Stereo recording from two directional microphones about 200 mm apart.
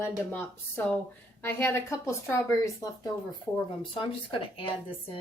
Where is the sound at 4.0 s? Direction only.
25° left (ahead or behind).